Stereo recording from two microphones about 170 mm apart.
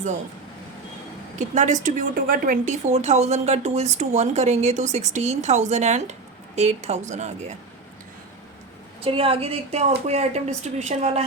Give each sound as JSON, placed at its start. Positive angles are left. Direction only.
{"t": 1.4, "sound": "a woman's voice", "side_deg": -45}
{"t": 9.0, "sound": "a woman's voice", "side_deg": -35}